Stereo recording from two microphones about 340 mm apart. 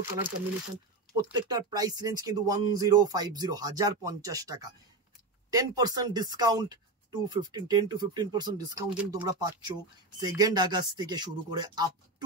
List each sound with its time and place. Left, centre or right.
1.1 s speech: centre